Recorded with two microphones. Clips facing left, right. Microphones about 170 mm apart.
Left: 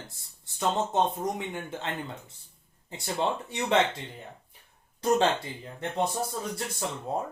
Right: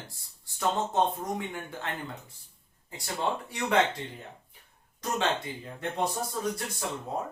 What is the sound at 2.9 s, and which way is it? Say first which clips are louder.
Speech: left 2 dB; 25° left (ahead or behind).